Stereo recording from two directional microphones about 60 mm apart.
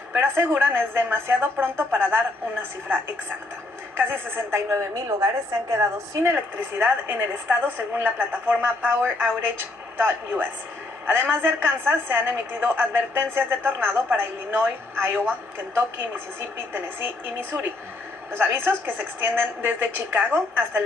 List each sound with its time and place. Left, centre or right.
0.2 s a woman's voice: right
5.0 s a woman's voice: right
6.7 s a woman's voice: right